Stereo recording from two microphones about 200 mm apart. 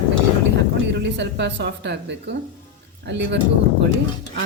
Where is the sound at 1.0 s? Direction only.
60° right (ahead or behind).